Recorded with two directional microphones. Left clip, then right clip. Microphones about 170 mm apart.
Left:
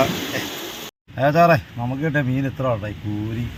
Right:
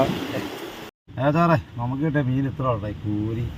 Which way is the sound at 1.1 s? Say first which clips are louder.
Left 5 dB; 20° left (ahead or behind).